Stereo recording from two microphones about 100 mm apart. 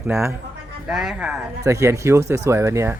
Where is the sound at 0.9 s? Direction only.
5° right (ahead or behind).